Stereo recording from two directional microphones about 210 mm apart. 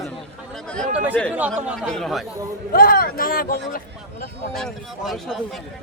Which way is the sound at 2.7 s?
45° left (ahead or behind).